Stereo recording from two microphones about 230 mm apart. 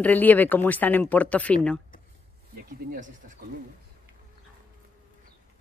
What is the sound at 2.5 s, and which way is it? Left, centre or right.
Speech, right.